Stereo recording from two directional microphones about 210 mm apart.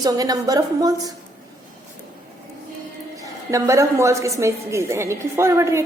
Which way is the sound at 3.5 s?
15° right (ahead or behind).